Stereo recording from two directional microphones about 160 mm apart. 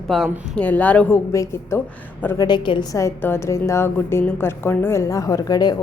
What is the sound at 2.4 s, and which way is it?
A woman's voice, 30° left (ahead or behind).